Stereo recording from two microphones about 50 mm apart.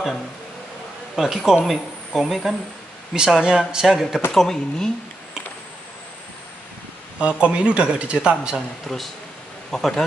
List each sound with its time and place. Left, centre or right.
1.1 s speech: centre
3.8 s speech: centre
7.2 s speech: right
8.8 s speech: centre